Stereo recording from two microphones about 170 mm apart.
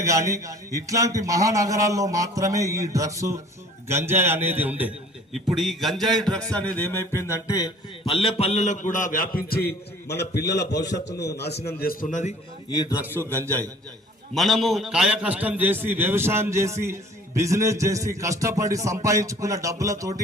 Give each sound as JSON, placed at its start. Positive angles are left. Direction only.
{"t": 0.0, "sound": "a man's voice", "side_deg": -20}
{"t": 6.7, "sound": "music", "side_deg": 15}
{"t": 8.0, "sound": "a man's voice", "side_deg": 30}
{"t": 11.8, "sound": "a man's voice", "side_deg": 55}
{"t": 14.3, "sound": "a man's voice", "side_deg": 0}